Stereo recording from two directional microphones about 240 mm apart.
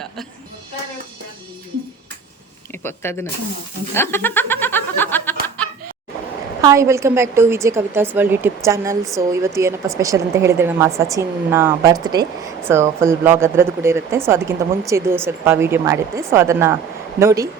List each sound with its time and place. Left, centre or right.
2.8 s speech: centre
3.9 s chuckle: centre
6.6 s speech: centre